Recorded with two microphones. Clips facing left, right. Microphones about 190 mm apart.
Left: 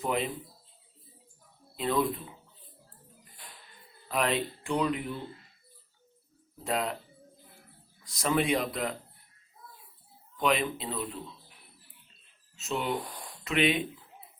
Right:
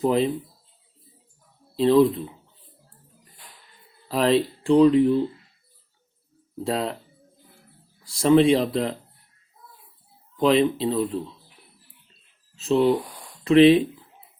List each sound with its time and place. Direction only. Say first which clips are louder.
0.0 s speech: right 10 dB; 30° right (ahead or behind)
1.7 s speech: right 12 dB; 30° right (ahead or behind)
4.1 s speech: right 9 dB; 30° right (ahead or behind)
6.7 s speech: right 5 dB; 30° right (ahead or behind)
8.0 s speech: right 12 dB; 30° right (ahead or behind)
10.3 s speech: right 9 dB; 30° right (ahead or behind)
12.5 s speech: right 12 dB; 30° right (ahead or behind)